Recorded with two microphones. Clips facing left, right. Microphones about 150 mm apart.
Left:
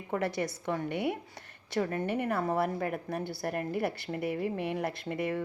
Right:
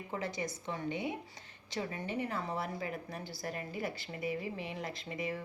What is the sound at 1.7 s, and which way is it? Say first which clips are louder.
A woman's voice: left 7 dB; 50° left (ahead or behind).